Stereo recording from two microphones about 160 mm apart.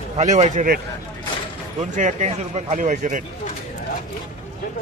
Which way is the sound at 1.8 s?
50° right (ahead or behind).